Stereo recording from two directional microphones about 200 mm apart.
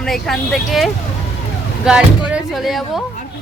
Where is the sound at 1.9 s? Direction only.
5° right (ahead or behind).